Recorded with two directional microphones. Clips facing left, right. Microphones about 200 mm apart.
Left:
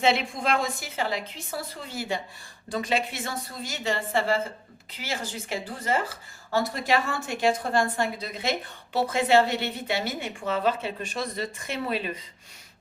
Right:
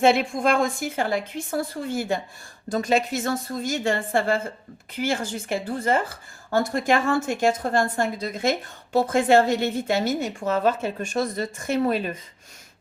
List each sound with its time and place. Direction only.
0.0 s speech: 50° right (ahead or behind)